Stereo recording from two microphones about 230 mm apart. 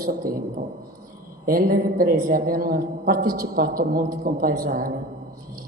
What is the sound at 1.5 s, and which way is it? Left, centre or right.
A woman's voice, right.